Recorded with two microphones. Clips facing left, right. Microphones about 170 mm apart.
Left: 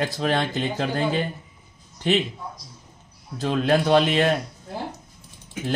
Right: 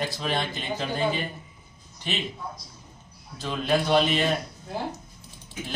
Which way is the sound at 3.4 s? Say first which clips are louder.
Left 5 dB; 45° left (ahead or behind).